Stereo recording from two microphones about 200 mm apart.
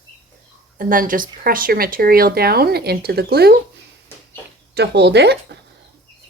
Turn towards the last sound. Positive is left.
turn(degrees=-55)  # may be behind; listen again after turning